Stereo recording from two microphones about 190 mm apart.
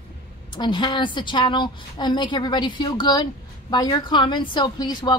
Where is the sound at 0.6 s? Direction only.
25° left (ahead or behind).